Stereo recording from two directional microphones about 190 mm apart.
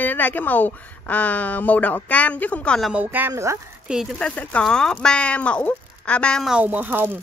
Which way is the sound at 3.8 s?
Centre (ahead or behind).